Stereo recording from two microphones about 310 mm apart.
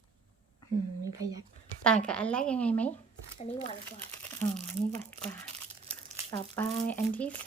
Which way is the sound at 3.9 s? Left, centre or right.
Centre.